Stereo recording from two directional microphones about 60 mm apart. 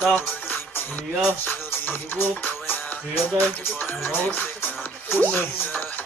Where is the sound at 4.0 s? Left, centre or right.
Left.